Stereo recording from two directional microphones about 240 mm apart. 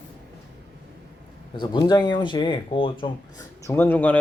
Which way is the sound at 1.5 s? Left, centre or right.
Centre.